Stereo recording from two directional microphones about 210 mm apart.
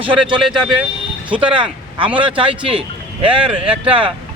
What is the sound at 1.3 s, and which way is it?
Speech, 25° right (ahead or behind).